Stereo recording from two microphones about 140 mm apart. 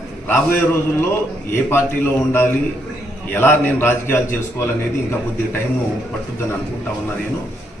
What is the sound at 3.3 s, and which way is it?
A man's voice, 15° left (ahead or behind).